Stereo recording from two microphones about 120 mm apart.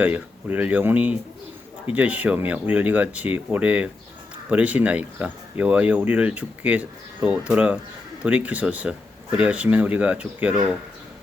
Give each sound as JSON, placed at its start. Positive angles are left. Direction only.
{"t": 0.0, "sound": "speech", "side_deg": -15}